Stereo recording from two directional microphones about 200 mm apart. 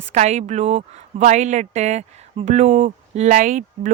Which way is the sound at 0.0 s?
35° right (ahead or behind).